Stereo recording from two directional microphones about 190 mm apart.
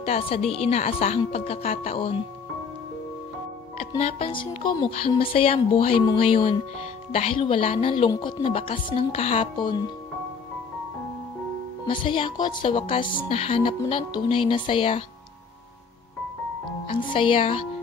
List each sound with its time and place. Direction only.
0.0 s speech: 30° left (ahead or behind)
4.0 s music: 30° left (ahead or behind)
11.8 s music: 25° left (ahead or behind)
16.8 s music: 25° left (ahead or behind)